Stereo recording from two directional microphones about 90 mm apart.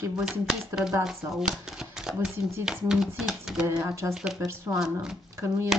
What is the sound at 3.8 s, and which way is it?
Speech, 35° right (ahead or behind).